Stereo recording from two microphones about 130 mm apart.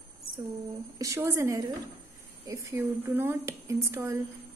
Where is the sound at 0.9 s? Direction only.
25° right (ahead or behind).